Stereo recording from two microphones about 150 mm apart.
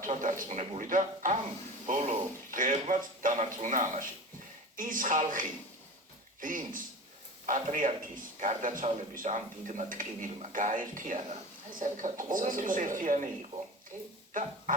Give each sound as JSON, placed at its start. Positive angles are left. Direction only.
{"t": 0.0, "sound": "speech", "side_deg": -60}